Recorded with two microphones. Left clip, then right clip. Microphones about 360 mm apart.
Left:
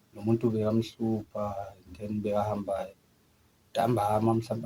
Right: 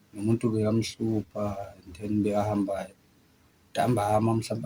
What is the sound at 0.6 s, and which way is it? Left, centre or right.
Speech, left.